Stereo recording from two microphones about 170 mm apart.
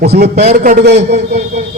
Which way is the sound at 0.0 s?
70° right (ahead or behind).